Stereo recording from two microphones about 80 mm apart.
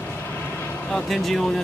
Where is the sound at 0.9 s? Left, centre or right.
Centre.